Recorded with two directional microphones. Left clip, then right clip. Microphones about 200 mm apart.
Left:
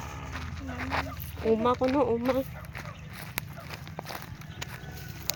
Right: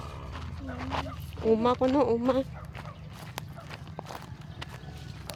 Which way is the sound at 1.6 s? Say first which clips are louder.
Even; 10° right (ahead or behind).